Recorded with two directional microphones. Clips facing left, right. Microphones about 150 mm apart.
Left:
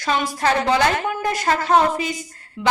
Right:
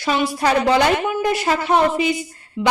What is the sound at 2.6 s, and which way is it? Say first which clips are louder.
Speech: right 1 dB; 20° right (ahead or behind).